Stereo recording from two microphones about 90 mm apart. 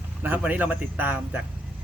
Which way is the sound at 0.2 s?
20° right (ahead or behind).